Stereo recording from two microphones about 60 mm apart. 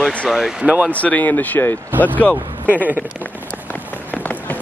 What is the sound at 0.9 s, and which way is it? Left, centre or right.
Speech, left.